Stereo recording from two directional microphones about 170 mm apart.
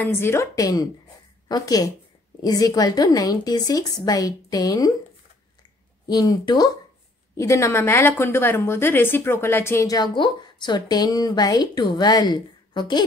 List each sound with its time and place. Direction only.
0.0 s a woman's voice: 15° left (ahead or behind)
6.0 s a woman's voice: 20° left (ahead or behind)